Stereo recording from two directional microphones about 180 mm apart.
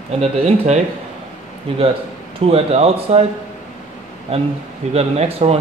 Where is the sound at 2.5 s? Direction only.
35° right (ahead or behind).